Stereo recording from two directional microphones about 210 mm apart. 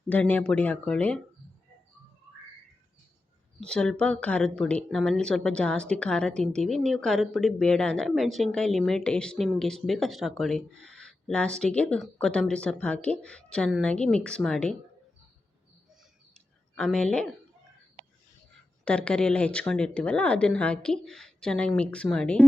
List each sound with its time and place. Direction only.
0.1 s speech: 5° left (ahead or behind)
3.6 s speech: 5° left (ahead or behind)
16.3 s a sound: 5° left (ahead or behind)
18.9 s speech: 5° left (ahead or behind)